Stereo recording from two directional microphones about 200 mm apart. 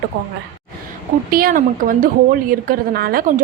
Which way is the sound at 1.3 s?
45° right (ahead or behind).